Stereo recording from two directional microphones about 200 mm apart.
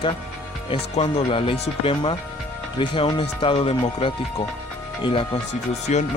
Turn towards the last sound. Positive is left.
turn(degrees=35)  # may be behind; listen again after turning